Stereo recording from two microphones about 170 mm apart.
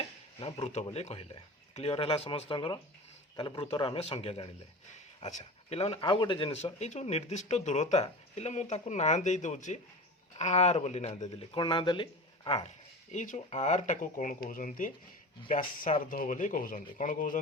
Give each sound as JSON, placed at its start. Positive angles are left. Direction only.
{"t": 0.3, "sound": "speech", "side_deg": 30}